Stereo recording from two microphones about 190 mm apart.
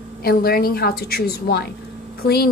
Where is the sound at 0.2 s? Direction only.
55° left (ahead or behind).